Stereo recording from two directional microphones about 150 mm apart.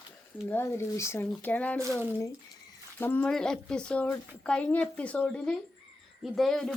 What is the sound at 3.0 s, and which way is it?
Speech, 10° left (ahead or behind).